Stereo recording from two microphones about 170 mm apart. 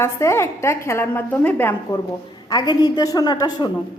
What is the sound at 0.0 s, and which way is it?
A woman's voice, 15° left (ahead or behind).